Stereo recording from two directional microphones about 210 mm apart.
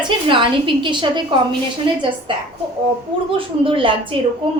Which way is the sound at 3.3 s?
25° right (ahead or behind).